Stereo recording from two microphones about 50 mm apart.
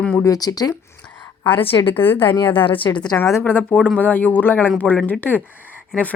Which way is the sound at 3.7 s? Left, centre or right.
Left.